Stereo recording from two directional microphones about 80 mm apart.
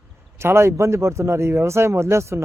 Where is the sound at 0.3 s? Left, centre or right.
Right.